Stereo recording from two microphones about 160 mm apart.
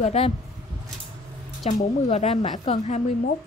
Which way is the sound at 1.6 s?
40° left (ahead or behind).